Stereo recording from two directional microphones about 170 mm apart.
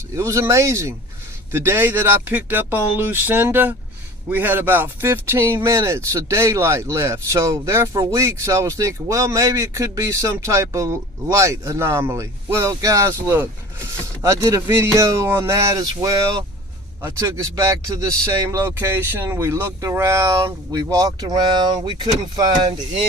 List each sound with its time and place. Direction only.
0.2 s speech: 15° right (ahead or behind)